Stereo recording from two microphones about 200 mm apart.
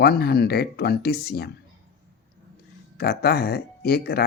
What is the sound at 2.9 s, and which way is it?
Speech, 50° left (ahead or behind).